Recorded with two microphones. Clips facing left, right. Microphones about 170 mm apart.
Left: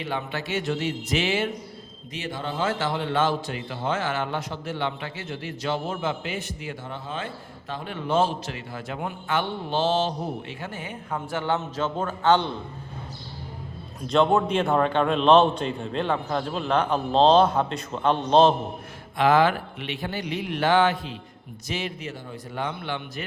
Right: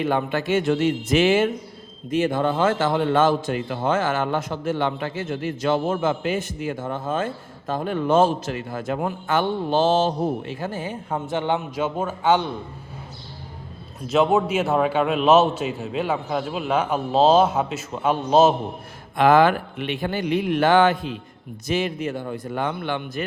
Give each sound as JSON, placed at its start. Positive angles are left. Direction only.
{"t": 0.0, "sound": "a man's voice", "side_deg": -50}
{"t": 14.1, "sound": "a man's voice", "side_deg": -5}
{"t": 19.1, "sound": "a man's voice", "side_deg": -50}